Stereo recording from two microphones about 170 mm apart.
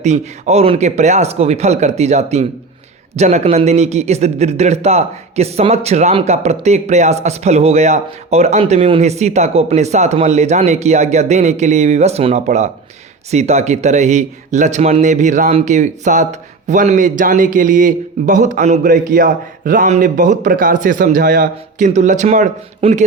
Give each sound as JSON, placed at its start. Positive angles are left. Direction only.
{"t": 0.0, "sound": "a man's voice", "side_deg": -40}